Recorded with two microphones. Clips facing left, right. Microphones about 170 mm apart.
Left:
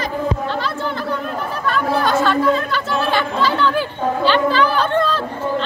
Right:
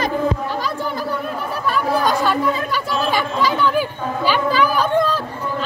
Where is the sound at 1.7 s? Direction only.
15° right (ahead or behind).